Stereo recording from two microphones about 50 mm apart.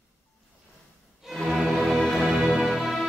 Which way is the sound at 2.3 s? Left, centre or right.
Centre.